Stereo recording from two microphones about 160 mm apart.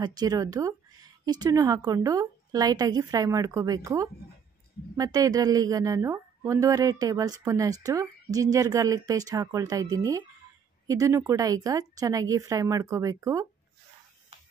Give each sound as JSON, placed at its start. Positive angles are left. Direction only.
{"t": 0.0, "sound": "a woman's voice", "side_deg": -25}